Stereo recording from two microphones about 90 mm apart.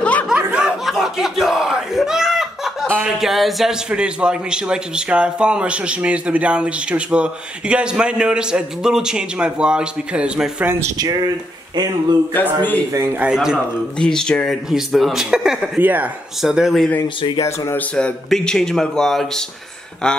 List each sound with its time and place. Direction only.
0.0 s snicker: 15° left (ahead or behind)
0.3 s battle cry: 10° right (ahead or behind)
3.2 s a man's voice: centre (ahead or behind)
11.0 s speech: 50° right (ahead or behind)
12.3 s a man's voice: 20° left (ahead or behind)
12.9 s a man's voice: 30° right (ahead or behind)
13.2 s a man's voice: 10° right (ahead or behind)
13.9 s a man's voice: 10° left (ahead or behind)
15.8 s speech: 20° right (ahead or behind)
16.3 s a man's voice: 5° right (ahead or behind)
17.4 s speech: 30° left (ahead or behind)
17.7 s speech: 10° left (ahead or behind)